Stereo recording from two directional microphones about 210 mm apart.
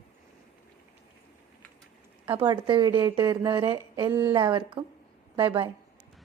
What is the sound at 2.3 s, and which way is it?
A woman's voice, 25° right (ahead or behind).